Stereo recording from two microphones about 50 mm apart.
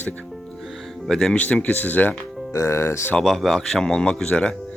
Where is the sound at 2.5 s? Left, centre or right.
Left.